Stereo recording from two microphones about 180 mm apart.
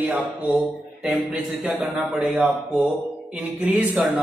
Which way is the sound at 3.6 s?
10° right (ahead or behind).